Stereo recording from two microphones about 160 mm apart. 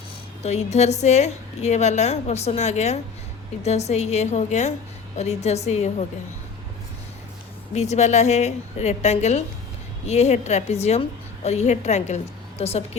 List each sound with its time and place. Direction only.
0.4 s a woman's voice: 45° left (ahead or behind)
7.7 s a woman's voice: 45° left (ahead or behind)